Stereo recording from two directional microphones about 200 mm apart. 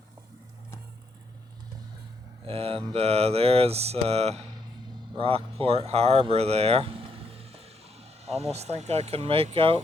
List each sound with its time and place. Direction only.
2.5 s speech: 30° right (ahead or behind)